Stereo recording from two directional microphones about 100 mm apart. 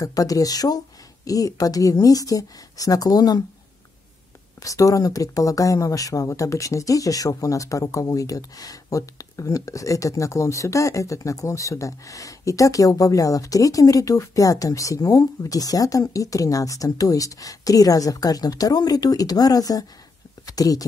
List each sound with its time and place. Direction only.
0.0 s speech: 35° left (ahead or behind)
4.6 s speech: 35° left (ahead or behind)